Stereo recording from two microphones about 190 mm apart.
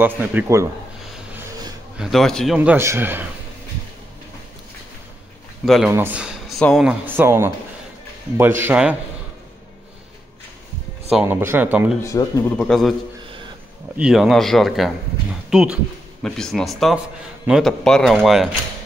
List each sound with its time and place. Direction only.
0.0 s speech: 10° right (ahead or behind)
2.0 s a man's voice: centre (ahead or behind)
5.7 s speech: 5° right (ahead or behind)
11.1 s speech: 10° right (ahead or behind)
12.0 s speech: 20° left (ahead or behind)
12.5 s a man's voice: centre (ahead or behind)
13.9 s a man's voice: 5° right (ahead or behind)